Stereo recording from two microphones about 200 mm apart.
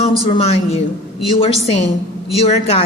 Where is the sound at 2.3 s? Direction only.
30° left (ahead or behind).